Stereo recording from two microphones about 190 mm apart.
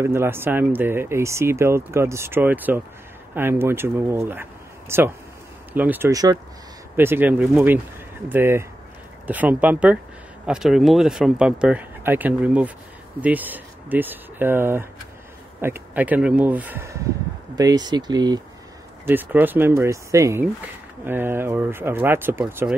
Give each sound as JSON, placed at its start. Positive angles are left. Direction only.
{"t": 0.0, "sound": "speech", "side_deg": -15}
{"t": 19.0, "sound": "speech", "side_deg": -10}